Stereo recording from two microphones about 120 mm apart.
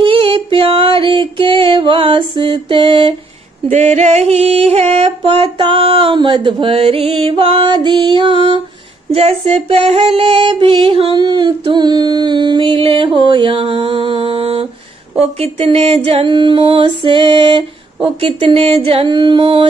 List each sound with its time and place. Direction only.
0.0 s music: 45° right (ahead or behind)
3.6 s female singing: 70° right (ahead or behind); by 8.6 s 45° right (ahead or behind)
9.1 s female singing: 55° right (ahead or behind)